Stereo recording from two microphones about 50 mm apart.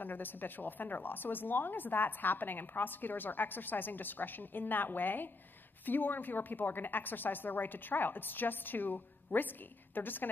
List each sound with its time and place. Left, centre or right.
0.0 s a woman's voice: left